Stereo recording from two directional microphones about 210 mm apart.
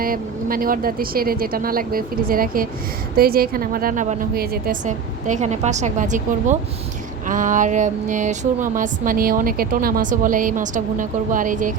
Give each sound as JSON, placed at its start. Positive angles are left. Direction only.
{"t": 0.0, "sound": "speech", "side_deg": -45}